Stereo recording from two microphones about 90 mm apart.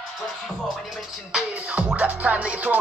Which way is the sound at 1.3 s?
15° right (ahead or behind).